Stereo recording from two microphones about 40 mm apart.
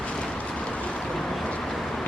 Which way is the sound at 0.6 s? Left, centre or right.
Left.